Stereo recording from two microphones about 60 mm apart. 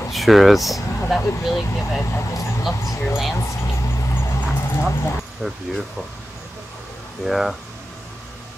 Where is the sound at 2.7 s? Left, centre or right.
Left.